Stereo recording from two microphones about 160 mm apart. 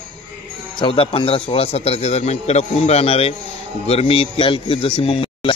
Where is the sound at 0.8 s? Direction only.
35° left (ahead or behind).